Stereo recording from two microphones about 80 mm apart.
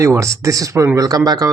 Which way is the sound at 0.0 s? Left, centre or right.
Right.